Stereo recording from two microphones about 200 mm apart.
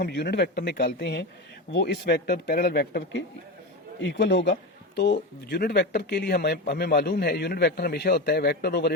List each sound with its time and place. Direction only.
0.0 s a man's voice: 55° left (ahead or behind)
4.0 s a man's voice: 65° left (ahead or behind)